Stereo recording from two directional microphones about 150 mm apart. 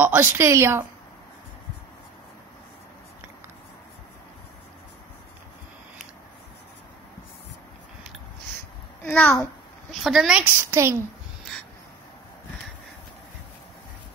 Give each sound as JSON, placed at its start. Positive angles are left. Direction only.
{"t": 0.0, "sound": "a woman's voice", "side_deg": -15}
{"t": 9.0, "sound": "a child's voice", "side_deg": 10}
{"t": 9.9, "sound": "speech", "side_deg": -5}
{"t": 10.7, "sound": "a woman's voice", "side_deg": -20}